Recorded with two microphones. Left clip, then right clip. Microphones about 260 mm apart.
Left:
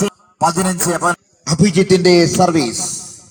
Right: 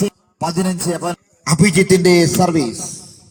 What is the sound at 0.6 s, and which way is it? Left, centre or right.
Speech, left.